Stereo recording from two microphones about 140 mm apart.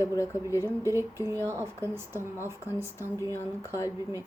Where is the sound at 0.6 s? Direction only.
20° right (ahead or behind).